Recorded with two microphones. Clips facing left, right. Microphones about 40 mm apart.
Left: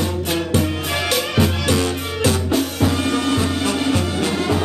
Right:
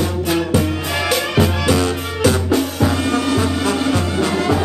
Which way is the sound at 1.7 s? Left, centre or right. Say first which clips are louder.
Right 2 dB; right.